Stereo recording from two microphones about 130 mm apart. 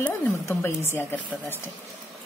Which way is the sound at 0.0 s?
15° left (ahead or behind).